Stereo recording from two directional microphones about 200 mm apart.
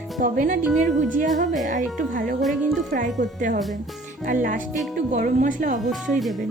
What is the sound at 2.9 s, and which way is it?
Speech, 40° right (ahead or behind).